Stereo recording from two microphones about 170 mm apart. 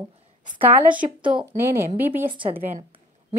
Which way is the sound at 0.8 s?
10° right (ahead or behind).